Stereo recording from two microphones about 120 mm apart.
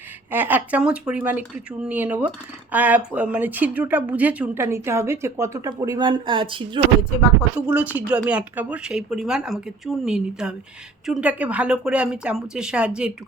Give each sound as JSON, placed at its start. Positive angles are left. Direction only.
{"t": 0.3, "sound": "a woman's voice", "side_deg": -15}
{"t": 7.5, "sound": "a woman's voice", "side_deg": -10}